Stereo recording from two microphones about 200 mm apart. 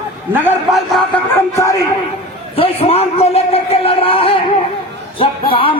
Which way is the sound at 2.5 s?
30° left (ahead or behind).